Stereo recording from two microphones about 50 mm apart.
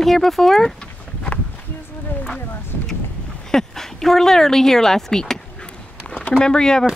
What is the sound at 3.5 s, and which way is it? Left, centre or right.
Speech, centre.